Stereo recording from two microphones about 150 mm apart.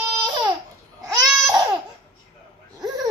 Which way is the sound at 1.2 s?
25° right (ahead or behind).